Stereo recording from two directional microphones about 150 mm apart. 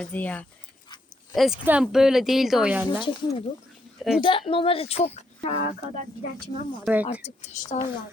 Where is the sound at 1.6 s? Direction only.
5° right (ahead or behind).